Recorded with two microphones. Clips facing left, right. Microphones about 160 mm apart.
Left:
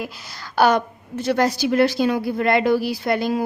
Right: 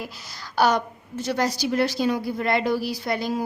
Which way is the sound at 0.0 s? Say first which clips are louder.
Left 4 dB; 60° left (ahead or behind).